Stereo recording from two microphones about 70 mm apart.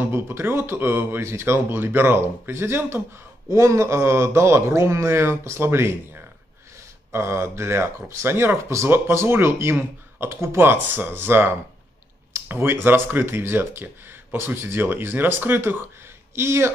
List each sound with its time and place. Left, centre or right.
0.0 s speech: right